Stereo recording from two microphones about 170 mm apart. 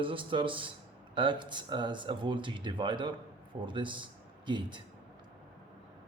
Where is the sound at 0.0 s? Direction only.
30° right (ahead or behind).